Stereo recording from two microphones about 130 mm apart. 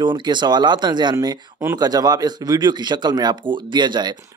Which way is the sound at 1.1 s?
20° right (ahead or behind).